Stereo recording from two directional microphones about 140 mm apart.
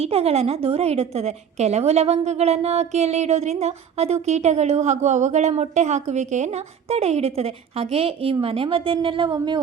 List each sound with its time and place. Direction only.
0.0 s a woman's voice: 45° right (ahead or behind)